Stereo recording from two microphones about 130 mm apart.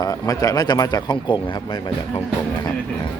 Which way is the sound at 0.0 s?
30° left (ahead or behind).